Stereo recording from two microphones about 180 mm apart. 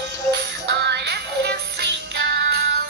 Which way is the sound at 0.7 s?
70° right (ahead or behind).